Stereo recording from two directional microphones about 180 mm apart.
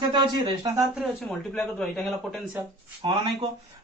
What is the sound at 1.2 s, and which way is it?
Speech, 5° left (ahead or behind).